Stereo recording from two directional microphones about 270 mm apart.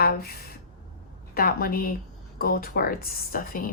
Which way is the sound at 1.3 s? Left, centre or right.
Left.